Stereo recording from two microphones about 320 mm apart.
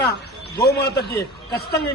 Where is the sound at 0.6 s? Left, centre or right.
Left.